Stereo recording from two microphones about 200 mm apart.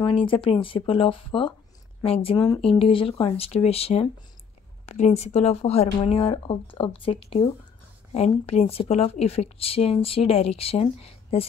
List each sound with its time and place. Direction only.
0.0 s speech: 25° left (ahead or behind)